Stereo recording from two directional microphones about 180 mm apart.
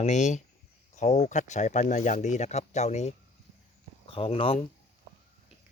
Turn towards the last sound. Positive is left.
turn(degrees=30)  # may be behind; listen again after turning